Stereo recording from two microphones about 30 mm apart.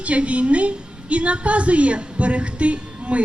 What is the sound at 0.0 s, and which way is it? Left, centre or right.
A woman's voice, right.